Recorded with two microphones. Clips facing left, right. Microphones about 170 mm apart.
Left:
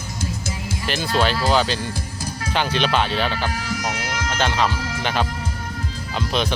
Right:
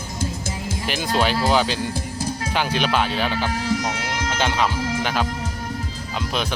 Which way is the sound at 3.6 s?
25° right (ahead or behind).